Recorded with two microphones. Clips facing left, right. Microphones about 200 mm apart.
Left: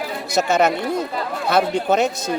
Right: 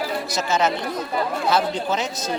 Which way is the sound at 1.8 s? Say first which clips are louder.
Left 7 dB; 60° left (ahead or behind).